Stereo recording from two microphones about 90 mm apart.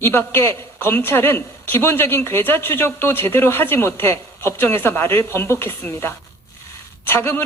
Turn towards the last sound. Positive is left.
turn(degrees=25)  # may be behind; listen again after turning